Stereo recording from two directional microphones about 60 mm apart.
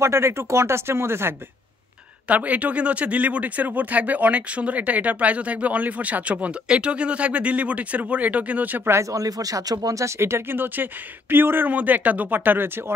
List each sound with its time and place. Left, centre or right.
0.0 s speech: right
2.2 s speech: right
9.1 s speech: right
10.0 s speech: right